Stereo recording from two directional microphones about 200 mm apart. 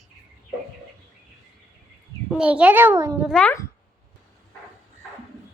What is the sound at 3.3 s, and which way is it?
Speech, 5° left (ahead or behind).